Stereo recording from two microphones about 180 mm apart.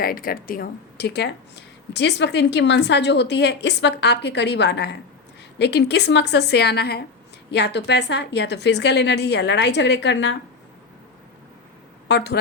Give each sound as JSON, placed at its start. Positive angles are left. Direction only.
{"t": 0.0, "sound": "speech", "side_deg": 55}
{"t": 12.0, "sound": "speech", "side_deg": 70}